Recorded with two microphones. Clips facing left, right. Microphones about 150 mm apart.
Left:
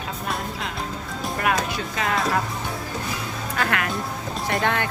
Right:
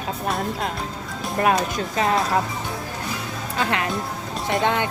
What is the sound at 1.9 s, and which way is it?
Speech, 35° right (ahead or behind).